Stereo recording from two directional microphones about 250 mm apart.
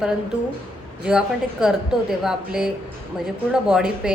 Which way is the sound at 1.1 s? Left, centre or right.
Centre.